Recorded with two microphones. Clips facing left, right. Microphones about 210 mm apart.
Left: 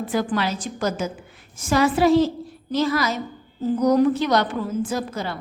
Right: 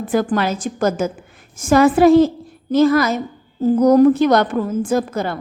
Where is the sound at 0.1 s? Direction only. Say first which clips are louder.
Right 6 dB; 50° right (ahead or behind).